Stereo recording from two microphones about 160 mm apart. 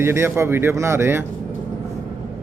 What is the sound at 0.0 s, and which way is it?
Speech, 15° right (ahead or behind).